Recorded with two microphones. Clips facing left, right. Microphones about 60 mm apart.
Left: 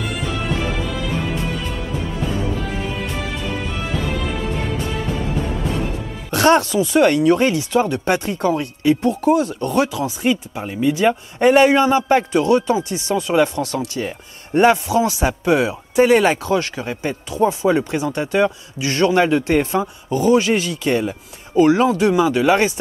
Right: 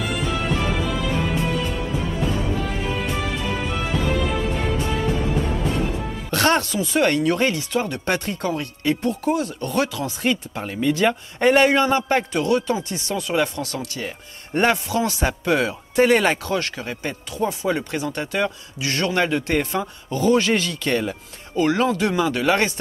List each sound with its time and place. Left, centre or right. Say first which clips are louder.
0.0 s music: even; centre
2.7 s music: even; centre
6.3 s a man's voice: left 5 dB; left
10.2 s a man's voice: left 2 dB; centre; by 12.7 s left
13.1 s a man's voice: left 6 dB; centre
16.9 s a man's voice: left 5 dB; centre
17.3 s speech: left 7 dB; left